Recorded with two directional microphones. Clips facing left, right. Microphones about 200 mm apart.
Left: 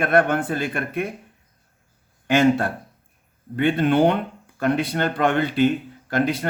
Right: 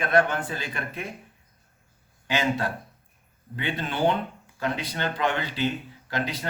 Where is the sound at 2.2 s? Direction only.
55° left (ahead or behind).